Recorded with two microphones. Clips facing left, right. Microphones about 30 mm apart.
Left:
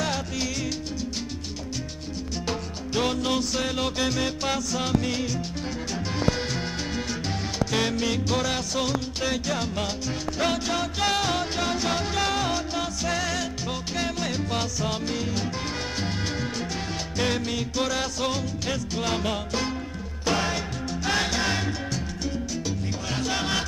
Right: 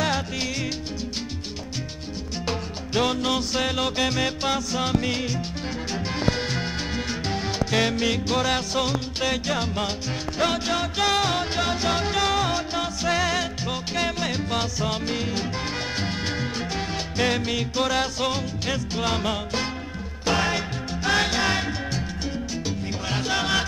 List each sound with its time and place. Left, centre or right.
0.0 s music: right
2.4 s music: centre
5.9 s salsa music: centre
10.4 s music: centre